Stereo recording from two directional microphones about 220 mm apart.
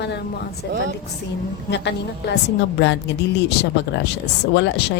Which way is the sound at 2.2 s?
50° left (ahead or behind).